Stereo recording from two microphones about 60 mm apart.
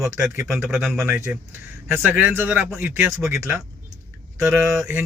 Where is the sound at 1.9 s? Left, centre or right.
Right.